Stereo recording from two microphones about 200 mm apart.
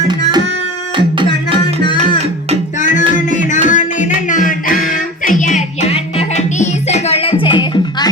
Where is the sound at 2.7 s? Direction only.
40° left (ahead or behind).